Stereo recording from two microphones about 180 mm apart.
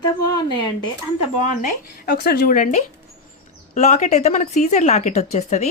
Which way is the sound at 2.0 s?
55° left (ahead or behind).